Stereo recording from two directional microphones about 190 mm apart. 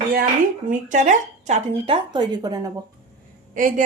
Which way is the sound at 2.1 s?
20° right (ahead or behind).